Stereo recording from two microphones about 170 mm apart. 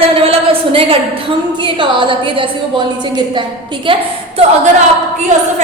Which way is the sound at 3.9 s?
30° right (ahead or behind).